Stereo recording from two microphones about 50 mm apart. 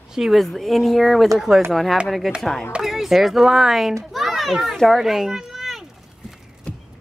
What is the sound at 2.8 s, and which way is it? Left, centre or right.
Speech, centre.